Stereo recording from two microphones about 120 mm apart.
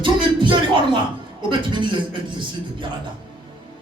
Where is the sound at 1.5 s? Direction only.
40° right (ahead or behind).